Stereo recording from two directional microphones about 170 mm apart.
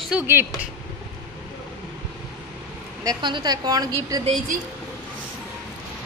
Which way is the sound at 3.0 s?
25° right (ahead or behind).